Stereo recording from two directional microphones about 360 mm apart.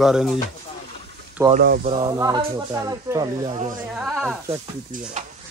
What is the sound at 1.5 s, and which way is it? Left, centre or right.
Speech, right.